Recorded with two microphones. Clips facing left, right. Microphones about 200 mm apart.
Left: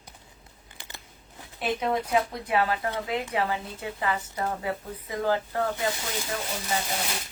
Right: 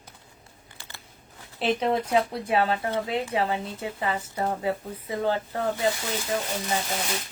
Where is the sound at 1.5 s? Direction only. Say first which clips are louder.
Right 3 dB; 30° right (ahead or behind).